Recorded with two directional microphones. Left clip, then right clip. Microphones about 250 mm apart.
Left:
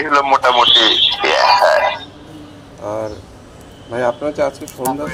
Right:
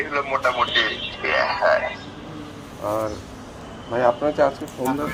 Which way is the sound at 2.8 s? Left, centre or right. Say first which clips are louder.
Left 2 dB; centre.